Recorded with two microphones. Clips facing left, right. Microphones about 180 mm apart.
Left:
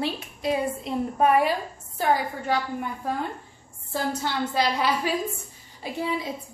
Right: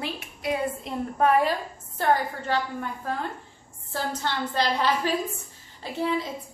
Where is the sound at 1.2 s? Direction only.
15° left (ahead or behind).